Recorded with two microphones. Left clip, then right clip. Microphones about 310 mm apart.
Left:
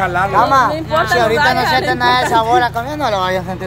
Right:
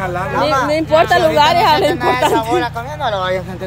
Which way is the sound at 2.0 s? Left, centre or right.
Centre.